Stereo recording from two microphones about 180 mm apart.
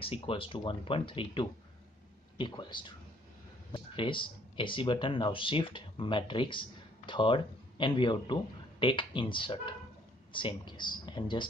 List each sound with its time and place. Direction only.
0.0 s speech: 30° left (ahead or behind)